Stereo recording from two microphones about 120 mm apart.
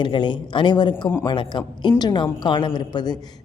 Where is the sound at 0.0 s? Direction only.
40° left (ahead or behind).